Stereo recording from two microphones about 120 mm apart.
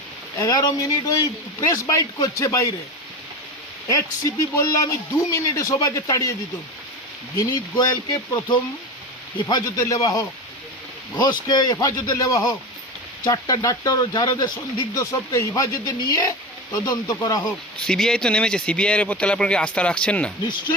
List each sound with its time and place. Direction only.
0.3 s speech: 30° left (ahead or behind)
3.8 s speech: 30° left (ahead or behind)
7.3 s speech: 30° left (ahead or behind)
14.9 s speech: 25° left (ahead or behind)
17.7 s speech: 5° left (ahead or behind)